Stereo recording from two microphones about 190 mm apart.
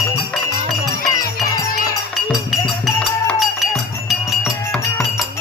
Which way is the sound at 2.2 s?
Centre (ahead or behind).